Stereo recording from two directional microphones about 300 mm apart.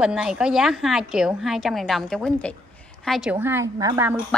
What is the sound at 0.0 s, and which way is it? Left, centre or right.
A woman's voice, centre.